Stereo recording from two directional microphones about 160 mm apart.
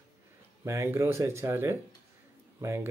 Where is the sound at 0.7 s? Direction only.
15° right (ahead or behind).